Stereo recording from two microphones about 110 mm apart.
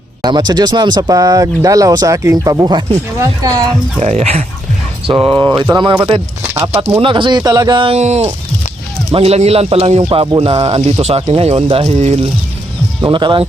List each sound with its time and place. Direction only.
0.2 s speech: 40° right (ahead or behind)
4.0 s speech: 70° right (ahead or behind)
5.0 s speech: 45° right (ahead or behind)
6.4 s speech: 25° right (ahead or behind)
7.0 s speech: 45° right (ahead or behind)
7.9 s speech: 80° right
9.1 s speech: 70° right (ahead or behind)
10.0 s speech: 50° right (ahead or behind)
11.9 s speech: 75° right (ahead or behind)
13.0 s speech: 45° right (ahead or behind)